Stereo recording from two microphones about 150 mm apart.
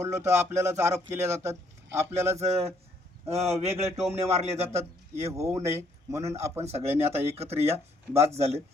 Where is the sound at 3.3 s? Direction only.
45° right (ahead or behind).